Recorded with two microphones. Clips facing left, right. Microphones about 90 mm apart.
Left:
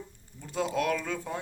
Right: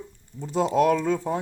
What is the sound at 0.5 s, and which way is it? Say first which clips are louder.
Speech: right 8 dB; 30° right (ahead or behind).